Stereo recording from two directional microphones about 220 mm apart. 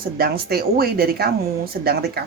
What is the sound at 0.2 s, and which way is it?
Speech, 45° right (ahead or behind).